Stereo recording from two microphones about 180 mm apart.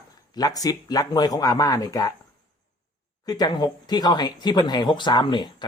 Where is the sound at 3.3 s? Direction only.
25° left (ahead or behind).